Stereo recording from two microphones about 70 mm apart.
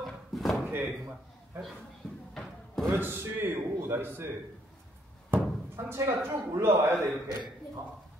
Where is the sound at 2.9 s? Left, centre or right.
Right.